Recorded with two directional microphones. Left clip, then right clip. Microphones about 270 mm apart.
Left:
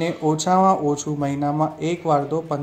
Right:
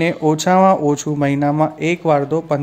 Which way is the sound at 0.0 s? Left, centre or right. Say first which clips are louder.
Right 5 dB; right.